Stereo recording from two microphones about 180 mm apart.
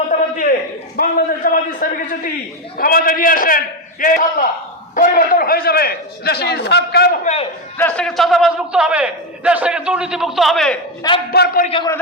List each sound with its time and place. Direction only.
0.1 s a sound: 50° left (ahead or behind)
0.9 s a man's voice: 50° left (ahead or behind)
7.8 s a man's voice: 5° left (ahead or behind)
11.3 s a man's voice: 55° left (ahead or behind)